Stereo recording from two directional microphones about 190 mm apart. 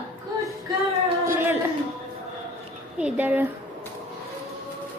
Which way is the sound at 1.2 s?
10° right (ahead or behind).